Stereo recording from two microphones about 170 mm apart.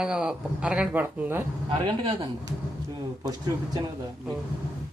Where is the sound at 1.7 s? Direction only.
30° right (ahead or behind).